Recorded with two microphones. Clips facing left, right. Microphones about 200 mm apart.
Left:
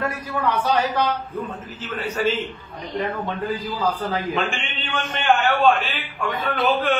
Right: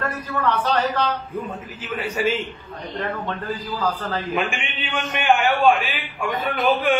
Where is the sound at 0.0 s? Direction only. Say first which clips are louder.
Even; 10° left (ahead or behind).